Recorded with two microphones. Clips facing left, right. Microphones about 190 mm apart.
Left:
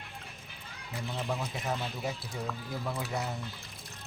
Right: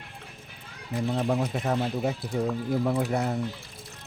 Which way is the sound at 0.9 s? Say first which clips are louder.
Right 9 dB; 50° right (ahead or behind).